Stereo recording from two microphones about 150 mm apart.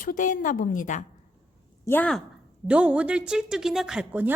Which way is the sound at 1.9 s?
10° left (ahead or behind).